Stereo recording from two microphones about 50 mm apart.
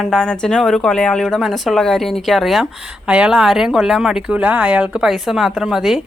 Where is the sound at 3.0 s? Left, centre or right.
Centre.